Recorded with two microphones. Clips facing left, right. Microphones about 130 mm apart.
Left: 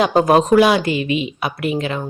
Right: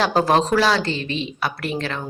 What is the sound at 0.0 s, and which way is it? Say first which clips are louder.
Speech: left 4 dB; 5° left (ahead or behind).